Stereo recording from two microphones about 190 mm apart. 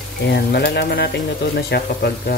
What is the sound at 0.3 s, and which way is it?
Speech, 60° left (ahead or behind).